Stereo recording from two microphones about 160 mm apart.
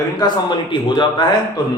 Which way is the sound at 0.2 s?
30° left (ahead or behind).